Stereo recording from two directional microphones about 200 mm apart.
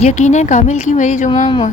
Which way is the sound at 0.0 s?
35° left (ahead or behind).